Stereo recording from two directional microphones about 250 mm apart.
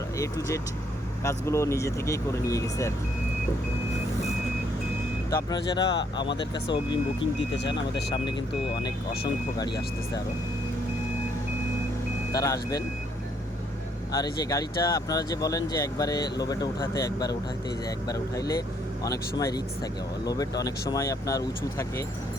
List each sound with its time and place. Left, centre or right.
0.2 s speech: centre
5.3 s speech: centre
12.3 s speech: centre
14.1 s speech: centre